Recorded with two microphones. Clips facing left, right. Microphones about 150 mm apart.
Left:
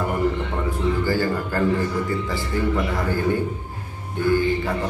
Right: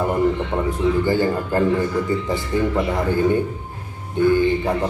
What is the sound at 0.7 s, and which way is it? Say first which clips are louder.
Speech: right 3 dB; 20° right (ahead or behind).